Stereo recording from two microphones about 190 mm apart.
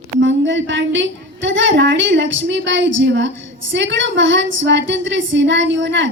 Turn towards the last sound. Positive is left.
turn(degrees=-75)  # may be behind; listen again after turning